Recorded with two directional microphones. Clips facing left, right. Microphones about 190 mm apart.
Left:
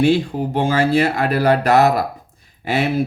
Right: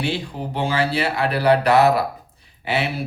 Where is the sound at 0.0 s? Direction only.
45° left (ahead or behind).